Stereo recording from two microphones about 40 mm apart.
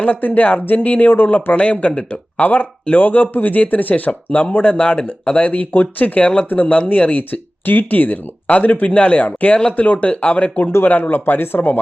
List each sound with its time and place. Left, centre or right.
0.0 s speech: left
1.1 s speech: left
1.5 s speech: left
4.8 s speech: left
5.5 s speech: left
6.6 s speech: left
6.8 s speech: left